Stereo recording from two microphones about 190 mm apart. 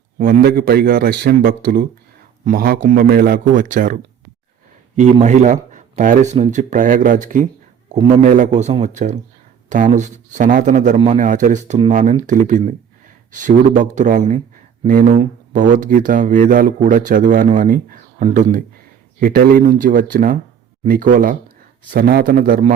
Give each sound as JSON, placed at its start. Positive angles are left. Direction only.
{"t": 0.2, "sound": "speech", "side_deg": -45}
{"t": 5.2, "sound": "a man's voice", "side_deg": -40}